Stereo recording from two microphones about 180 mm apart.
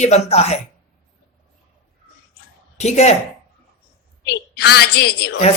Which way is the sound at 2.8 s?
40° left (ahead or behind).